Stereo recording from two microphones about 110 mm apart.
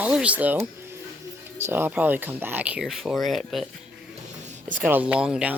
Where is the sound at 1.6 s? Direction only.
20° right (ahead or behind); by 3.7 s centre (ahead or behind).